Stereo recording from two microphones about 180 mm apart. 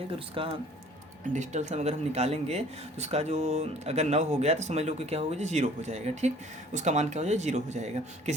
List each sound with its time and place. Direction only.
0.4 s speech: 30° right (ahead or behind)
1.3 s speech: 40° right (ahead or behind)